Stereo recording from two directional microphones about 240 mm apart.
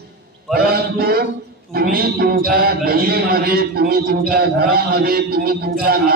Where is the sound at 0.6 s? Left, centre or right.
Right.